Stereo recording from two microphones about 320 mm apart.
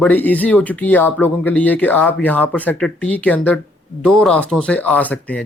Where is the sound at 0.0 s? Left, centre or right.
Centre.